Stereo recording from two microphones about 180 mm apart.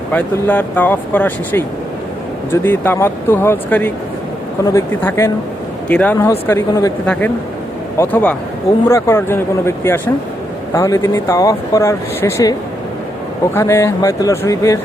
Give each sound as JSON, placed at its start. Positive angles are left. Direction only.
{"t": 0.1, "sound": "speech", "side_deg": 10}